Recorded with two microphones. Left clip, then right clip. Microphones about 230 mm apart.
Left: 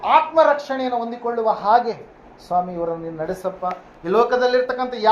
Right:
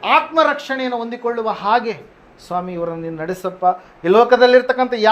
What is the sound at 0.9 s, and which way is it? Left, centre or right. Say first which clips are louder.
Speech: right 1 dB; right.